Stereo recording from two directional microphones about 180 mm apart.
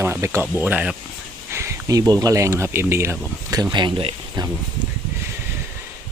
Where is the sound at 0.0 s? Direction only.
15° right (ahead or behind).